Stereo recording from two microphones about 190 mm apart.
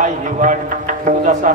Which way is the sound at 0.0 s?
40° right (ahead or behind).